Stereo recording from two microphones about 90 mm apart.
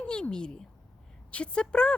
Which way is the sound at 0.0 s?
10° left (ahead or behind).